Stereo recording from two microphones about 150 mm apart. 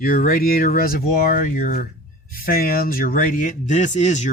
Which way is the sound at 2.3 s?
75° left (ahead or behind).